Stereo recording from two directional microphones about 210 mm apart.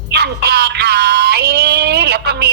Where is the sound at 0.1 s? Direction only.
50° right (ahead or behind).